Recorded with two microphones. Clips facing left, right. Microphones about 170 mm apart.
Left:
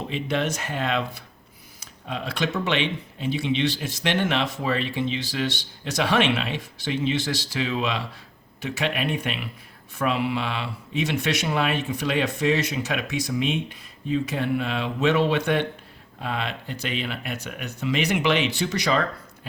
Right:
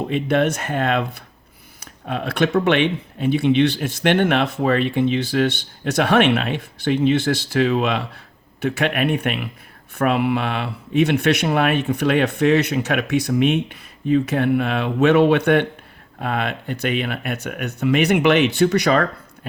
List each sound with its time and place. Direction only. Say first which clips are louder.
0.1 s speech: right 7 dB; 55° right (ahead or behind)